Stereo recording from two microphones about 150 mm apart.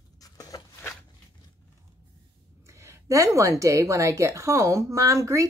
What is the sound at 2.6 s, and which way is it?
A woman's voice, 20° right (ahead or behind).